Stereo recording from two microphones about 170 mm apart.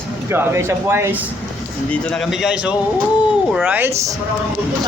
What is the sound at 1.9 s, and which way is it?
Speech, 5° left (ahead or behind).